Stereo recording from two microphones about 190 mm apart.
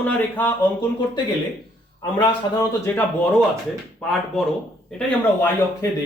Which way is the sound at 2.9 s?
10° left (ahead or behind).